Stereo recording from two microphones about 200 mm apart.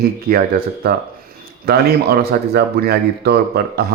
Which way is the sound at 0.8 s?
50° right (ahead or behind).